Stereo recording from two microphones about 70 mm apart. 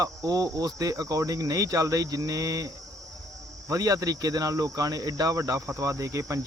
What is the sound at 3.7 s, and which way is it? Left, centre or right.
Speech, right.